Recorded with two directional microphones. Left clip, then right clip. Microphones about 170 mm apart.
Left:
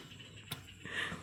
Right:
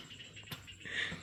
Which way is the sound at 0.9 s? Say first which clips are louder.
Right 1 dB; 35° left (ahead or behind).